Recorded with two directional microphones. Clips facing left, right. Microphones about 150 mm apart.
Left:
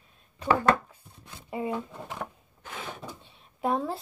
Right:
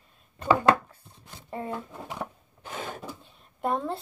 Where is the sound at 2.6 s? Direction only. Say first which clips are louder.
Right 4 dB; 35° right (ahead or behind).